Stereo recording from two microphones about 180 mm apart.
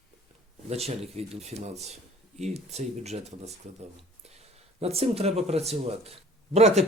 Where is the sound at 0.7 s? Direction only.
35° right (ahead or behind).